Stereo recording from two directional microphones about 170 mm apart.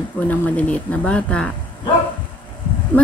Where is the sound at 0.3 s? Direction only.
10° left (ahead or behind).